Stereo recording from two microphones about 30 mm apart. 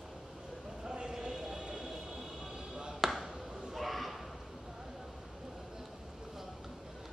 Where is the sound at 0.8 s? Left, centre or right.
Right.